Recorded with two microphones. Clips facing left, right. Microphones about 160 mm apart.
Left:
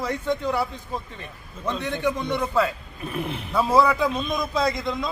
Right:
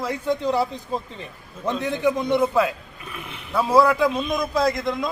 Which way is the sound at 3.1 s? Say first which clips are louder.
Left 8 dB; 35° left (ahead or behind).